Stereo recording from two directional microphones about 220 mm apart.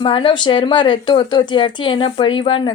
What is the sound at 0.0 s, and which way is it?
Speech, 25° left (ahead or behind).